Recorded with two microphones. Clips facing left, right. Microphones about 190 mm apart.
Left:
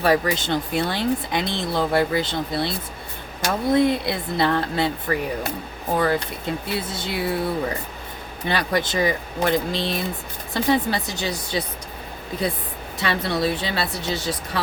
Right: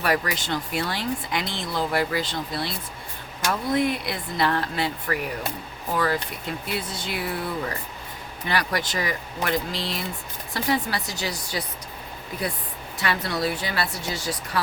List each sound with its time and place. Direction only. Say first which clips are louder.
0.0 s speech: left 5 dB; 25° left (ahead or behind)
13.0 s speech: left 3 dB; 25° left (ahead or behind)